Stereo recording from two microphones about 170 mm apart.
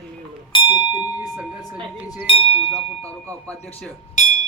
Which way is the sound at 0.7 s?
10° right (ahead or behind).